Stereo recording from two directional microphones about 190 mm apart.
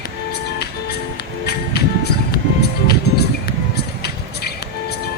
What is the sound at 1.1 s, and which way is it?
Music, 55° left (ahead or behind).